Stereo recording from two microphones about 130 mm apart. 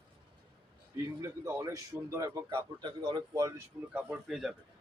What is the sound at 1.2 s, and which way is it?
A man's voice, 25° right (ahead or behind).